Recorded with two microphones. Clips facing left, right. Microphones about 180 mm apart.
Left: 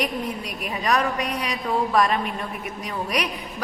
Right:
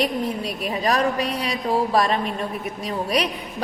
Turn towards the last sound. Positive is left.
turn(degrees=-30)  # may be behind; listen again after turning